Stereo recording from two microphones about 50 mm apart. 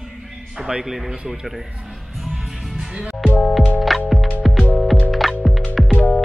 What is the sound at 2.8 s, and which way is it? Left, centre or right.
Music, centre.